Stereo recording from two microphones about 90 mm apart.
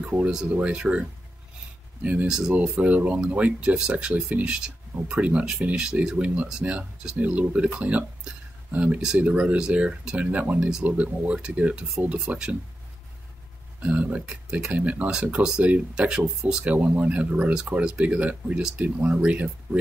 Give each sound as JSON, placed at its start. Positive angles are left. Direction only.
{"t": 0.0, "sound": "speech", "side_deg": -10}
{"t": 2.0, "sound": "speech", "side_deg": -10}
{"t": 13.8, "sound": "speech", "side_deg": -10}